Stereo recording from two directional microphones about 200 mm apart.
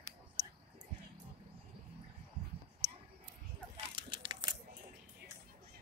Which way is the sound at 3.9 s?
25° right (ahead or behind).